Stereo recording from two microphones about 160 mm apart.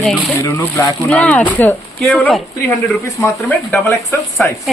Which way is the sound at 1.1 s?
10° left (ahead or behind).